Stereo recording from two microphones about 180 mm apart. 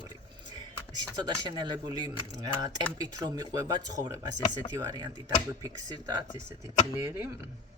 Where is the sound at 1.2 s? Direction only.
25° right (ahead or behind).